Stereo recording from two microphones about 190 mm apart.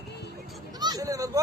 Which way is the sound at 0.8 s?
20° right (ahead or behind).